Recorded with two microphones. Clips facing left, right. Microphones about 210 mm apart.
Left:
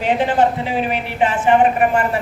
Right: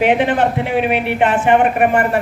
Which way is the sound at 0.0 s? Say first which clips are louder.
Right 2 dB; 65° right (ahead or behind).